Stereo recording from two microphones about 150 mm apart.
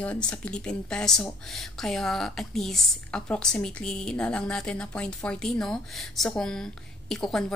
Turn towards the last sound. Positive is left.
turn(degrees=5)  # may be behind; listen again after turning